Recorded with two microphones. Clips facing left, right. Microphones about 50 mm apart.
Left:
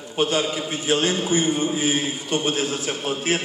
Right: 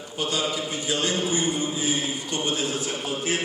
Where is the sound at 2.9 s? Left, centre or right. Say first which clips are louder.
Left 3 dB; left.